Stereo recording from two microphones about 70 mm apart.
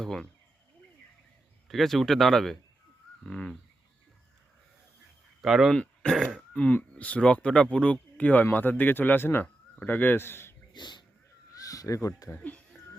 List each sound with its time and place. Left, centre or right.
0.0 s speech: centre
1.6 s speech: centre
5.4 s speech: centre
5.7 s speech: centre
6.1 s speech: centre
6.5 s speech: centre; by 10.5 s left
10.8 s speech: left
11.5 s speech: left
12.4 s speech: left